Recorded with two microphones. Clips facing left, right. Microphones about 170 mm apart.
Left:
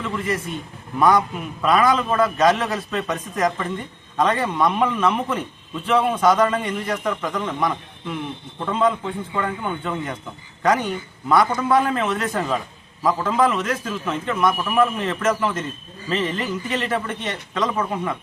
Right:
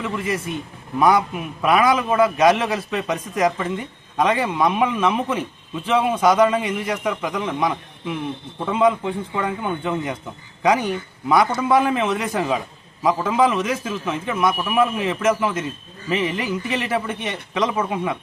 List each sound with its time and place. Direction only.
0.9 s a man's voice: 10° right (ahead or behind)